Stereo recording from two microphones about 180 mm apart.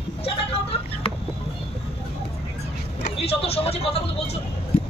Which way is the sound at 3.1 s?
30° left (ahead or behind).